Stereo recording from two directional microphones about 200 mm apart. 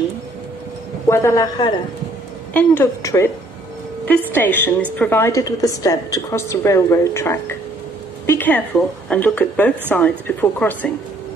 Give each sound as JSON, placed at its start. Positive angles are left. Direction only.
{"t": 1.0, "sound": "a woman's voice", "side_deg": 15}
{"t": 4.3, "sound": "a woman's voice", "side_deg": 10}